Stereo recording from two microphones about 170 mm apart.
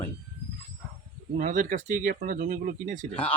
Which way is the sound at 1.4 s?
50° right (ahead or behind).